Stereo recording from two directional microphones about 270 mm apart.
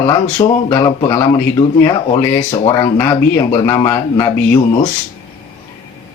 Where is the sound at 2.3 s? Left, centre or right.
Centre.